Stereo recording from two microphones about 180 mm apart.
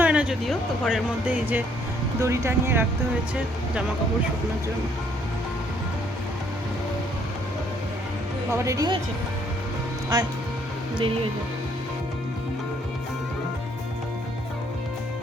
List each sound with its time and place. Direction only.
0.0 s speech: 5° right (ahead or behind)
8.5 s speech: 15° right (ahead or behind)
10.1 s speech: 25° right (ahead or behind)